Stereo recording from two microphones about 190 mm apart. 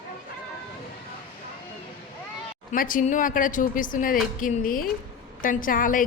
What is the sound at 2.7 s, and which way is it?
Speech, 45° left (ahead or behind).